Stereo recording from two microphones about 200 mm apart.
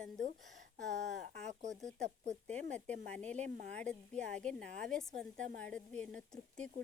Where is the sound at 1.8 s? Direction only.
Centre (ahead or behind).